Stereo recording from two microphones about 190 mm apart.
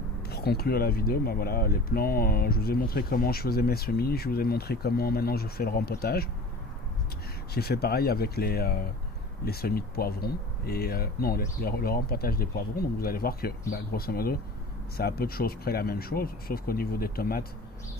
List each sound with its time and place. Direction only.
0.2 s speech: 55° left (ahead or behind)
7.5 s speech: 55° left (ahead or behind)